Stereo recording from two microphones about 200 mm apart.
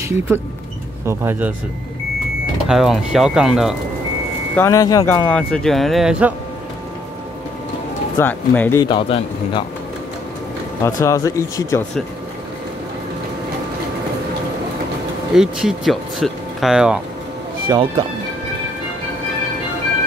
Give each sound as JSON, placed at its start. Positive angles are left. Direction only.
{"t": 1.0, "sound": "speech", "side_deg": -10}
{"t": 2.7, "sound": "speech", "side_deg": 0}
{"t": 4.6, "sound": "speech", "side_deg": 15}
{"t": 8.2, "sound": "speech", "side_deg": 10}
{"t": 8.8, "sound": "a man's voice", "side_deg": 25}
{"t": 11.0, "sound": "speech", "side_deg": 15}
{"t": 15.3, "sound": "speech", "side_deg": 0}
{"t": 17.6, "sound": "speech", "side_deg": -25}